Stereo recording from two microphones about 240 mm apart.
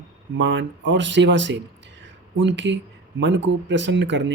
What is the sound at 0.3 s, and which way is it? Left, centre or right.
Speech, right.